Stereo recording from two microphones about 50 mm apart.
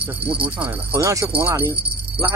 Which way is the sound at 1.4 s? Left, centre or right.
Right.